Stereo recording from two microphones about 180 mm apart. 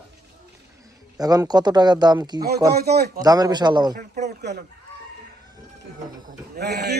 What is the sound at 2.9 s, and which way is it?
Speech, 65° right (ahead or behind).